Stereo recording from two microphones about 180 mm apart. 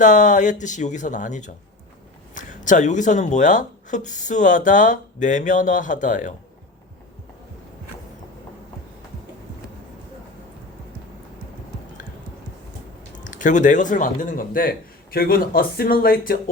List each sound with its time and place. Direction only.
0.0 s speech: 45° left (ahead or behind)
13.1 s speech: 45° left (ahead or behind)